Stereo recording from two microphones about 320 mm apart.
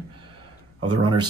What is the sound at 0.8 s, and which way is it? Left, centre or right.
Speech, centre.